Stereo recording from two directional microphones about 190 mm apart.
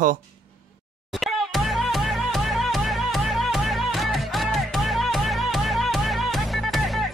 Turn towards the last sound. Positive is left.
turn(degrees=0)  # may be behind; listen again after turning